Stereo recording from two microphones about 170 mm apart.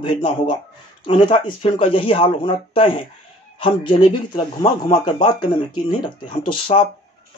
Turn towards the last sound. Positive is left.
turn(degrees=35)  # may be behind; listen again after turning